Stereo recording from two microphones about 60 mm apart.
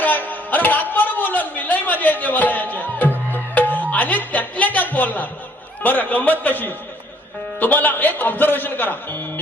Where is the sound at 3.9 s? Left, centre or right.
Left.